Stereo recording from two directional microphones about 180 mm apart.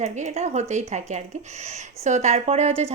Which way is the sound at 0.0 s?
40° right (ahead or behind).